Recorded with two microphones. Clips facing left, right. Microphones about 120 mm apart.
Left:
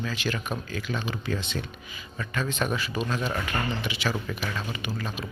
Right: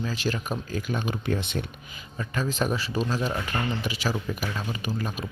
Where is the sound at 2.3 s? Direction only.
40° right (ahead or behind).